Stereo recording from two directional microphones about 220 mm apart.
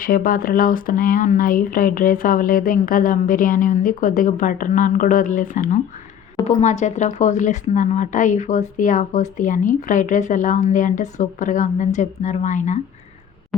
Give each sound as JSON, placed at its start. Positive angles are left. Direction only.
{"t": 0.0, "sound": "speech", "side_deg": 40}